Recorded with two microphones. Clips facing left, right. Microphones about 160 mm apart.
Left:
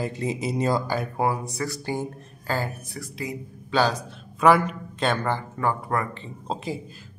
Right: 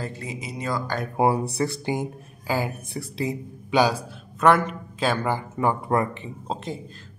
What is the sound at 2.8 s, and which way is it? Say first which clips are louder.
Speech: right 5 dB; 30° right (ahead or behind).